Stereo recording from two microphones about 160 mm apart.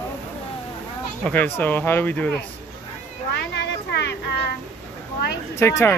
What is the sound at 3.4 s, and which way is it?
Speech, 90° left.